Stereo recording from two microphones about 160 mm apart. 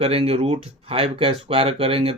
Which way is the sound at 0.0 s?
40° right (ahead or behind).